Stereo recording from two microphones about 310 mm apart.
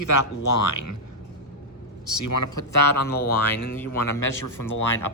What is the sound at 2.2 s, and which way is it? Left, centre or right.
Speech, left.